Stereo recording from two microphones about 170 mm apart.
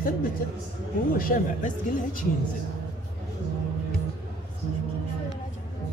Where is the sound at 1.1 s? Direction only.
55° left (ahead or behind).